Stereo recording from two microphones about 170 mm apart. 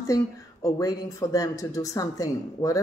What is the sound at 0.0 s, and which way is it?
A woman's voice, 20° left (ahead or behind).